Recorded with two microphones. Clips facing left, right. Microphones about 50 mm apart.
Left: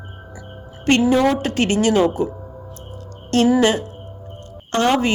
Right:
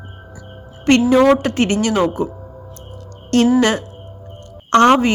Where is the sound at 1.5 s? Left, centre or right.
Right.